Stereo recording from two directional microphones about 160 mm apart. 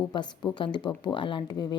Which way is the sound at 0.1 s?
30° left (ahead or behind).